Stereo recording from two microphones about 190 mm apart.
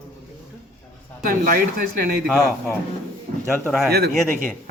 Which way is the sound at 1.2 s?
50° right (ahead or behind).